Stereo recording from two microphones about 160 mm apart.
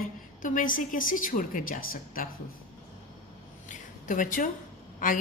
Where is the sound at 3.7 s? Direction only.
55° left (ahead or behind).